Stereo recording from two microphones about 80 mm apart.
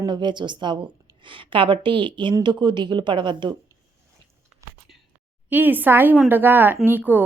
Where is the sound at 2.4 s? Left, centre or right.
Right.